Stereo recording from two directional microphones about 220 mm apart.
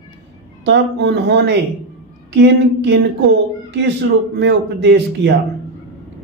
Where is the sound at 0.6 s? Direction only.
50° right (ahead or behind).